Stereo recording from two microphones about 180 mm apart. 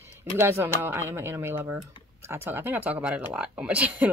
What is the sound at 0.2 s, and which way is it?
Speech, 15° right (ahead or behind).